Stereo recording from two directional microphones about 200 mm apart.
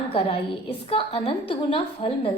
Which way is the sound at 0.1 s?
30° left (ahead or behind).